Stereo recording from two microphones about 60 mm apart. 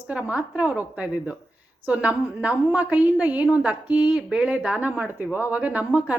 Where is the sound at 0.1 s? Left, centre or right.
Right.